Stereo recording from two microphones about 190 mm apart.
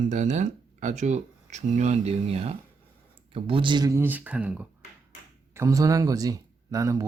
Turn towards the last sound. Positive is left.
turn(degrees=-15)  # may be behind; listen again after turning